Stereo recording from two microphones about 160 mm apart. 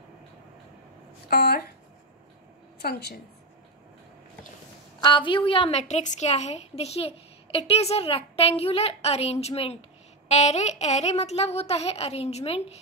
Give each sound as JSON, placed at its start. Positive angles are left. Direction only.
{"t": 1.3, "sound": "speech", "side_deg": 75}
{"t": 2.8, "sound": "a woman's voice", "side_deg": 80}
{"t": 5.0, "sound": "a woman's voice", "side_deg": 30}